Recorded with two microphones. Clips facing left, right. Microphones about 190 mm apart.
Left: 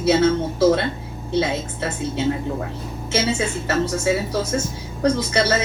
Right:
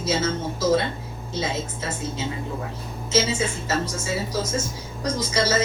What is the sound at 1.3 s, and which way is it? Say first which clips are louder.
Speech: left 6 dB; 65° left (ahead or behind).